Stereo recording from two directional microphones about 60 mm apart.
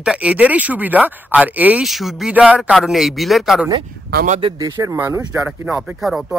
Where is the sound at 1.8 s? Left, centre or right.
Centre.